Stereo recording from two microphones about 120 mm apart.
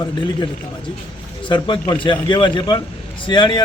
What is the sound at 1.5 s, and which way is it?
A man's voice, 40° left (ahead or behind).